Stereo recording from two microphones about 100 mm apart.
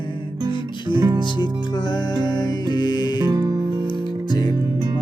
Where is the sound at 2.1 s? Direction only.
45° left (ahead or behind).